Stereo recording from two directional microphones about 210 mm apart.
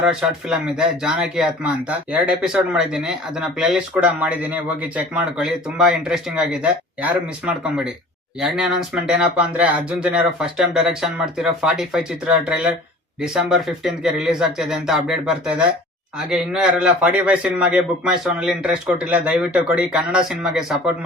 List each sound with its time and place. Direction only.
0.0 s speech: 5° right (ahead or behind)